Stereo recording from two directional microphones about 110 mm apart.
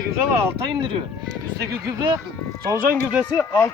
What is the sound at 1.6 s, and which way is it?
Speech, 30° right (ahead or behind).